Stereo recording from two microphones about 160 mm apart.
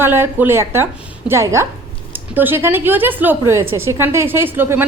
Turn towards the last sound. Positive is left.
turn(degrees=-15)  # may be behind; listen again after turning